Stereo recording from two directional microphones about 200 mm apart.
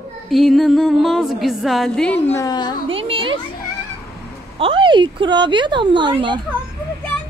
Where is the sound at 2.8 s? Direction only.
25° right (ahead or behind).